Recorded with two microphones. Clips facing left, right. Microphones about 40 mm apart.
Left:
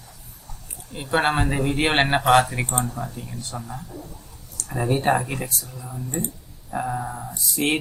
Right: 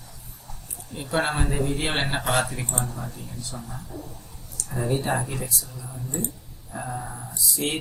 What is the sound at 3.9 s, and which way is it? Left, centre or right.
Speech, centre.